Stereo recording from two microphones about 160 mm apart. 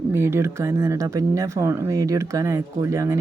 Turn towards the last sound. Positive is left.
turn(degrees=-20)  # may be behind; listen again after turning